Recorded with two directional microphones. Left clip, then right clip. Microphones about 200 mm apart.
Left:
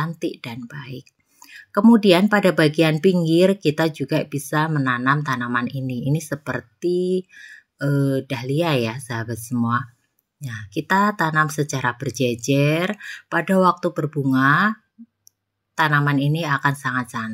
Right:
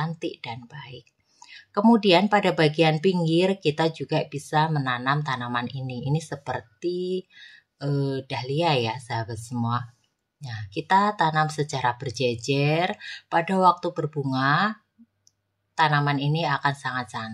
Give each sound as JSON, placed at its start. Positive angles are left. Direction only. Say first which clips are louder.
{"t": 0.0, "sound": "a woman's voice", "louder": "left 4 dB", "side_deg": 20}